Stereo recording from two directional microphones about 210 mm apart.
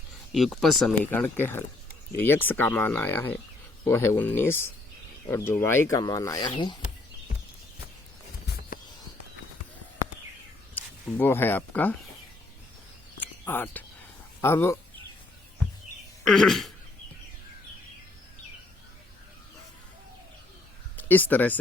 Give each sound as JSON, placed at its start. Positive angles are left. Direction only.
{"t": 0.3, "sound": "speech", "side_deg": 0}
{"t": 8.5, "sound": "a sound", "side_deg": 50}
{"t": 10.8, "sound": "speech", "side_deg": 10}
{"t": 13.1, "sound": "a sound", "side_deg": 10}
{"t": 14.4, "sound": "speech", "side_deg": 10}
{"t": 16.2, "sound": "speech", "side_deg": 0}
{"t": 20.9, "sound": "speech", "side_deg": 10}